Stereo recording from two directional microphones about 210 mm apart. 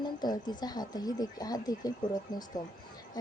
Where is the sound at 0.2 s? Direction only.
20° left (ahead or behind).